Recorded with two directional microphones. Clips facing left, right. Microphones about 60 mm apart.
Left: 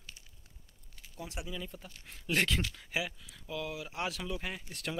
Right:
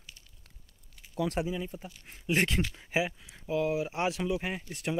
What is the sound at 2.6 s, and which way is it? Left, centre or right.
Speech, right.